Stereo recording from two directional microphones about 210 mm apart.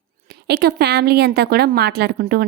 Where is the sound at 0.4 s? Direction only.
50° right (ahead or behind).